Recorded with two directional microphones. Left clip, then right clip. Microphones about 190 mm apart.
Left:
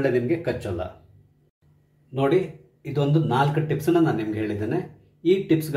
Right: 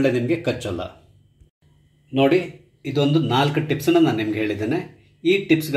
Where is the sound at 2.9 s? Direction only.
30° right (ahead or behind).